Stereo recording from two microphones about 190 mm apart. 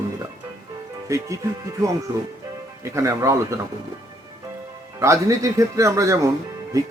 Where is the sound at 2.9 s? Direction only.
15° right (ahead or behind).